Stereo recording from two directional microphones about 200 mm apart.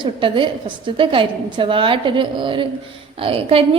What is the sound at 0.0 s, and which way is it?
A woman's voice, 25° right (ahead or behind).